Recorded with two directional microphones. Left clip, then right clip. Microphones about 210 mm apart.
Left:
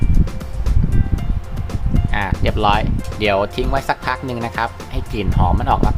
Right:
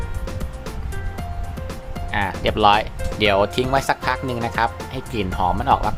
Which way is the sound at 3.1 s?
5° right (ahead or behind).